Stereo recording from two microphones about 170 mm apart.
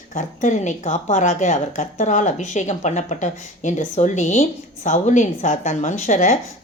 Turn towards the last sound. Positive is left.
turn(degrees=45)  # may be behind; listen again after turning